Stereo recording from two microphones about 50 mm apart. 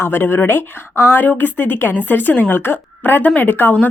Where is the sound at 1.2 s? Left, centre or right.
Left.